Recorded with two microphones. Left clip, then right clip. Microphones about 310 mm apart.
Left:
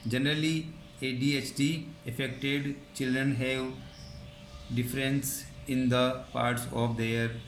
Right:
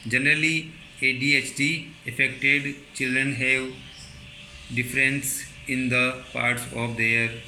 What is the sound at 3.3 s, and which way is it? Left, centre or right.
Speech, centre.